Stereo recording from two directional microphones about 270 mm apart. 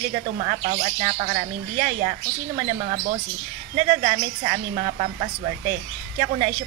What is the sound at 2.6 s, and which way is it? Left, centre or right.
A woman's voice, right.